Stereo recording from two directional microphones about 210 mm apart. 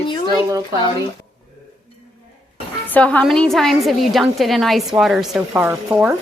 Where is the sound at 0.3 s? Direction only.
15° right (ahead or behind).